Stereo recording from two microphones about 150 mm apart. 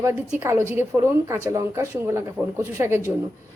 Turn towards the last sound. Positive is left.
turn(degrees=-15)  # may be behind; listen again after turning